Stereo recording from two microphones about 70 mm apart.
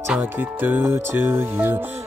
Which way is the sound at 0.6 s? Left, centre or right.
Right.